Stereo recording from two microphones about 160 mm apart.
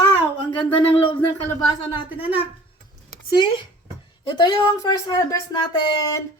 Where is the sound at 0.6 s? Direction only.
35° left (ahead or behind).